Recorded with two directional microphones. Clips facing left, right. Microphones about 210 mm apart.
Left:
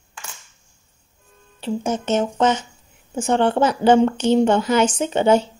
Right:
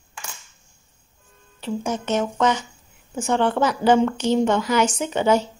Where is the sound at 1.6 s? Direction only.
25° left (ahead or behind).